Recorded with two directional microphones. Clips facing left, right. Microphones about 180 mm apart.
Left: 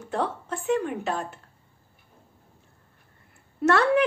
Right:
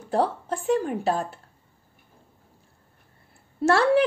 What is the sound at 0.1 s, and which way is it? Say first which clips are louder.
A woman's voice: right 4 dB; 35° right (ahead or behind).